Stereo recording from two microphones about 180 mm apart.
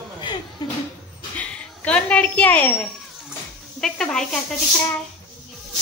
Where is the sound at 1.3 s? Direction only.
5° left (ahead or behind).